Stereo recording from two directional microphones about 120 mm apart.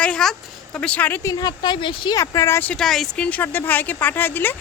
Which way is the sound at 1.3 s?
35° left (ahead or behind).